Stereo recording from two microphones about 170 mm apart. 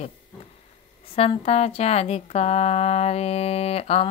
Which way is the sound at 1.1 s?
35° left (ahead or behind).